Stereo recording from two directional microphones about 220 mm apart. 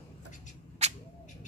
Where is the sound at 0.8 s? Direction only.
30° right (ahead or behind).